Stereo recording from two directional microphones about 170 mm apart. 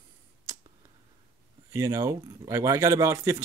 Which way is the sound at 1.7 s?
15° right (ahead or behind).